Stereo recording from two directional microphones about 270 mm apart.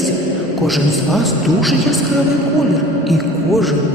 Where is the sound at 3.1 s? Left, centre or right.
Centre.